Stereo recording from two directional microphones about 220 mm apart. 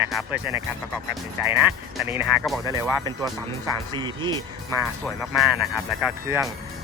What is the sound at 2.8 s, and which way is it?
Speech, 15° right (ahead or behind).